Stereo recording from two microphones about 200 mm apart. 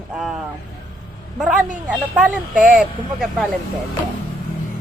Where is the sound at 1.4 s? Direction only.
5° right (ahead or behind).